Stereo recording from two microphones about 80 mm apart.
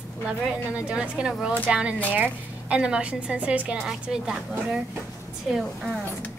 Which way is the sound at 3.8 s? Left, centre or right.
Centre.